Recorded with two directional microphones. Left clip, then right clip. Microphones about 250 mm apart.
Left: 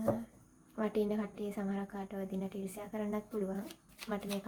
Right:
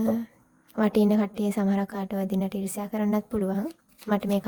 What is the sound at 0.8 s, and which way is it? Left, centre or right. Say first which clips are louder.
A woman's voice: right 11 dB; right.